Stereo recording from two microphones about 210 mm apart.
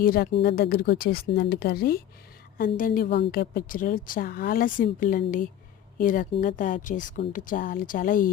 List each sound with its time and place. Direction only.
0.0 s a woman's voice: 45° left (ahead or behind)